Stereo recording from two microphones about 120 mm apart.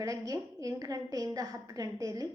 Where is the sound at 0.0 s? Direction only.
30° right (ahead or behind).